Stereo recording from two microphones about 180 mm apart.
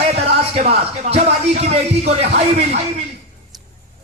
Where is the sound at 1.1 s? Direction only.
35° right (ahead or behind).